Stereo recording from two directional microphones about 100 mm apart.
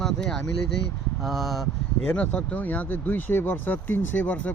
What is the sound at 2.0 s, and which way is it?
Speech, 15° left (ahead or behind).